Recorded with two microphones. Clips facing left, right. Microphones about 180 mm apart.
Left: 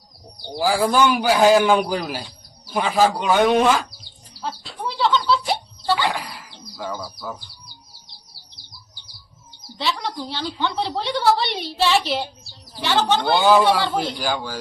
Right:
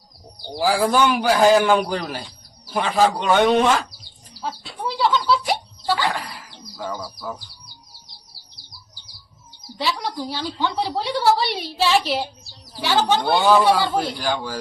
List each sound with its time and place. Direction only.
0.4 s a woman's voice: centre (ahead or behind)
4.4 s bird: centre (ahead or behind)
6.1 s a sound: centre (ahead or behind)
9.7 s a woman's voice: 10° right (ahead or behind)